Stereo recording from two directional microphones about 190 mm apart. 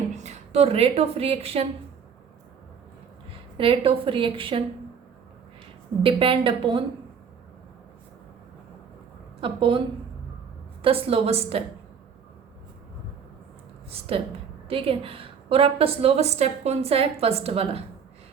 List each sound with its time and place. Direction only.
0.1 s a woman's voice: 35° right (ahead or behind)
3.6 s a woman's voice: 30° right (ahead or behind)
6.0 s a woman's voice: 30° right (ahead or behind)
9.4 s a woman's voice: 25° right (ahead or behind)
10.8 s a woman's voice: 30° right (ahead or behind)
14.7 s a woman's voice: 30° right (ahead or behind)